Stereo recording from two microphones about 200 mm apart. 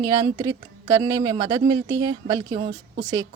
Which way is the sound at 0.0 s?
20° right (ahead or behind).